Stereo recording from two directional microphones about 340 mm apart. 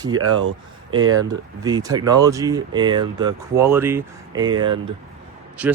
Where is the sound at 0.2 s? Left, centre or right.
Right.